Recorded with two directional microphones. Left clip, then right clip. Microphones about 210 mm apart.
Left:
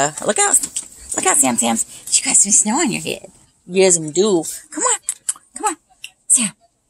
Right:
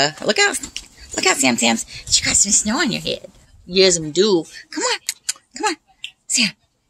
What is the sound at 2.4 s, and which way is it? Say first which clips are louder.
A woman's voice: left 1 dB; 10° left (ahead or behind).